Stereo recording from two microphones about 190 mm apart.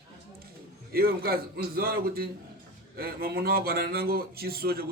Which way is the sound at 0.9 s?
55° right (ahead or behind).